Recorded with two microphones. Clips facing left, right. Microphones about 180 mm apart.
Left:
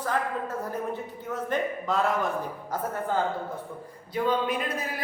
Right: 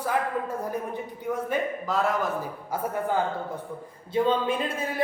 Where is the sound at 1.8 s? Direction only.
Centre (ahead or behind).